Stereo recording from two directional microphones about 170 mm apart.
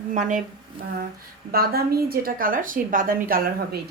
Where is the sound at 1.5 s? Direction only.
60° right (ahead or behind).